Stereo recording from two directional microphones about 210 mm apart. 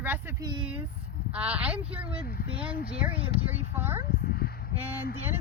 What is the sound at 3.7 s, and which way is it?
Speech, 10° right (ahead or behind).